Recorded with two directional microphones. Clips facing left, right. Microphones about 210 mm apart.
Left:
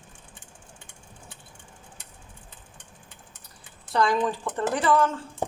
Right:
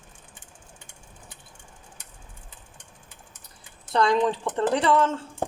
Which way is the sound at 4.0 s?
25° right (ahead or behind).